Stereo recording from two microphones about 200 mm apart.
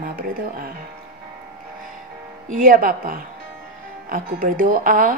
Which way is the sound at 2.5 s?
45° right (ahead or behind).